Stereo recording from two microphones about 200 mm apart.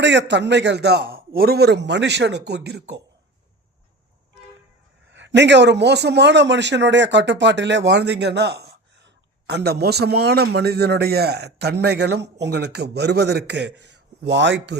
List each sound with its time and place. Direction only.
0.0 s a man's voice: 60° right (ahead or behind)
5.1 s a man's voice: 65° right (ahead or behind)